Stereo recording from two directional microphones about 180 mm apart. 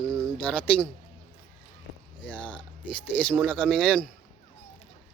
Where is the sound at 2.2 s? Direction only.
10° left (ahead or behind).